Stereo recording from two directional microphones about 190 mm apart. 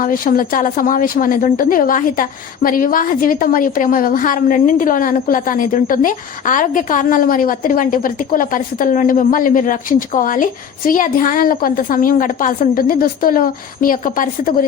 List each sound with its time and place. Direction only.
0.0 s a woman's voice: 45° left (ahead or behind)